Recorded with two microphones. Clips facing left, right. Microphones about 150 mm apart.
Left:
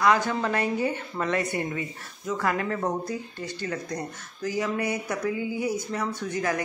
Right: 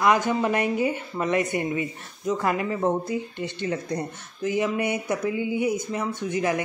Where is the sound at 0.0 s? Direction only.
15° right (ahead or behind).